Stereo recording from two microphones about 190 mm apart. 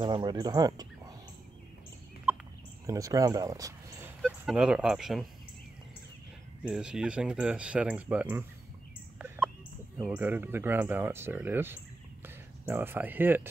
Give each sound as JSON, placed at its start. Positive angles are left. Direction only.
{"t": 0.0, "sound": "speech", "side_deg": -25}
{"t": 2.9, "sound": "speech", "side_deg": -15}
{"t": 4.2, "sound": "speech", "side_deg": -5}
{"t": 6.6, "sound": "speech", "side_deg": -5}
{"t": 9.9, "sound": "speech", "side_deg": -5}